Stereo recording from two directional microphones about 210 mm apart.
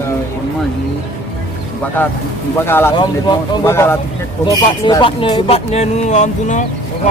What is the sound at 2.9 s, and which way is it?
Speech, 20° left (ahead or behind).